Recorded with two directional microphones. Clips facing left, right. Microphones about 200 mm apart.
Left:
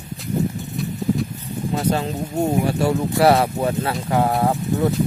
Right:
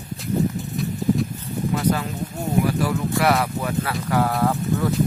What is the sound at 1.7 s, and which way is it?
Speech, 30° left (ahead or behind).